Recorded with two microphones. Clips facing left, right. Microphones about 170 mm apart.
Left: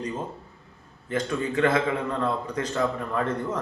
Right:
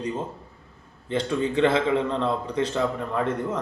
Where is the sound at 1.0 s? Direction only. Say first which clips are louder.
Right 2 dB; 25° right (ahead or behind).